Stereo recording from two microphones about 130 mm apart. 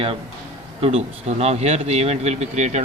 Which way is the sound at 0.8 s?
50° right (ahead or behind).